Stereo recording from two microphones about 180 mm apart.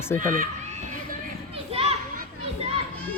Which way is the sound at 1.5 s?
30° right (ahead or behind).